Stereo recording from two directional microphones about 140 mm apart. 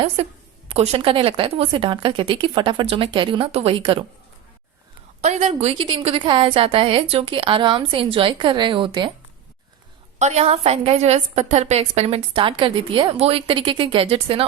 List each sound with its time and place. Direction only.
0.2 s a woman's voice: 45° right (ahead or behind)
5.2 s a woman's voice: 50° right (ahead or behind); by 9.1 s 35° right (ahead or behind)
10.2 s a woman's voice: 55° right (ahead or behind)